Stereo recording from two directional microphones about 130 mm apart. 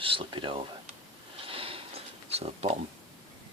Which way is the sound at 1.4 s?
45° right (ahead or behind).